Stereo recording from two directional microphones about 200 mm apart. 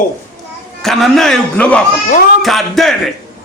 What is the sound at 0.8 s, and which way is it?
A man's voice, centre (ahead or behind).